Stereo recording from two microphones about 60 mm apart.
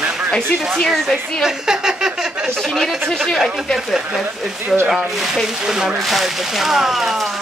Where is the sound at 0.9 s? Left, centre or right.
Centre.